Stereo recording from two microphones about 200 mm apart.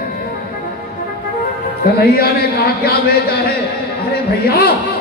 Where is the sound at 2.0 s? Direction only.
50° left (ahead or behind).